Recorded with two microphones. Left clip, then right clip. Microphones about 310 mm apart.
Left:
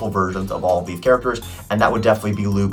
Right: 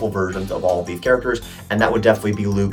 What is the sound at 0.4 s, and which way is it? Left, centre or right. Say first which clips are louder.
Speech: even; centre.